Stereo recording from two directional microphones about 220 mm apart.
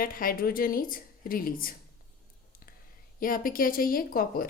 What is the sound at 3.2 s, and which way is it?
A woman's voice, 40° left (ahead or behind).